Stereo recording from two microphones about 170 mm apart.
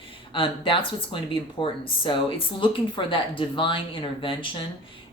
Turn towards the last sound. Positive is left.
turn(degrees=30)  # may be behind; listen again after turning